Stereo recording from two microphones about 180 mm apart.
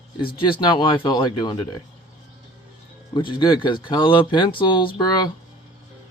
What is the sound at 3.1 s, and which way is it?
Speech, 25° left (ahead or behind).